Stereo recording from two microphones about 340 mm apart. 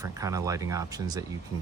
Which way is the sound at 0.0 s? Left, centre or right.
Centre.